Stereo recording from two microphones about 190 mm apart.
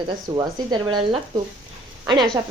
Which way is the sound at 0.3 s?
25° right (ahead or behind).